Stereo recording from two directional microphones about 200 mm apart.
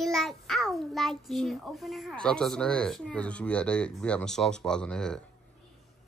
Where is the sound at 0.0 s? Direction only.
Centre (ahead or behind).